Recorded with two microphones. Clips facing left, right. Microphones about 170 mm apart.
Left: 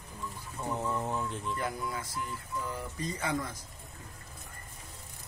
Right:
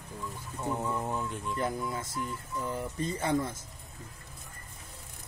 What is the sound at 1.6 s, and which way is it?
Speech, 25° right (ahead or behind).